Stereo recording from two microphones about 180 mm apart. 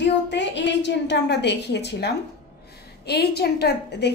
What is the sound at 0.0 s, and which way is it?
A woman's voice, 80° left.